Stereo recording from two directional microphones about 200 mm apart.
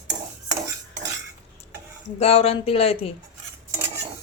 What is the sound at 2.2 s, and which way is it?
Speech, 30° left (ahead or behind).